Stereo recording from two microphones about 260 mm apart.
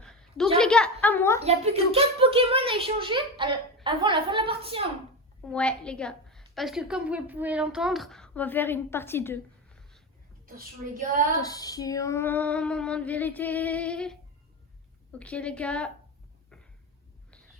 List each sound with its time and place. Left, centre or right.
0.0 s a sound: centre
1.4 s a woman's voice: right
5.5 s a woman's voice: centre
10.4 s a woman's voice: right
11.4 s female singing: centre
15.2 s a woman's voice: centre